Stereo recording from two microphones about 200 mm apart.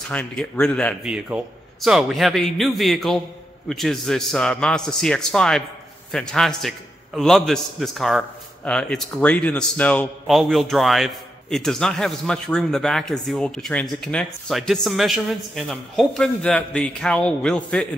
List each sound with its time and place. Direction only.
0.1 s a man's voice: 5° left (ahead or behind)